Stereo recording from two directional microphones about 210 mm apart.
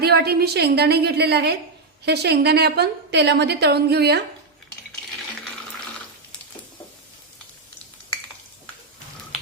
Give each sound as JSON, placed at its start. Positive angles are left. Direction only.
{"t": 0.0, "sound": "a woman's voice", "side_deg": -50}